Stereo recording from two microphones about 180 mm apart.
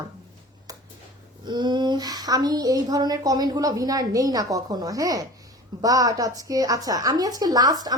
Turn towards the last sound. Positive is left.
turn(degrees=-20)  # may be behind; listen again after turning